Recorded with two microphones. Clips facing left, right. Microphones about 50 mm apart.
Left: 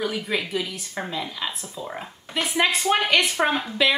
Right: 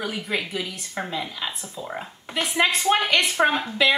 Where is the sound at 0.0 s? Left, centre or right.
Centre.